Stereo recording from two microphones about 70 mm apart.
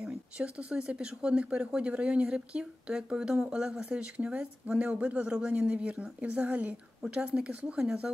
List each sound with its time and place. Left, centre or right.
0.0 s speech: centre